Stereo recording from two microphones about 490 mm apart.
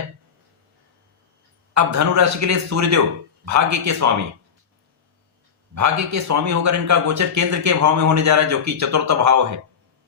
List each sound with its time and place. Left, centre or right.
1.7 s a man's voice: right
5.7 s a man's voice: right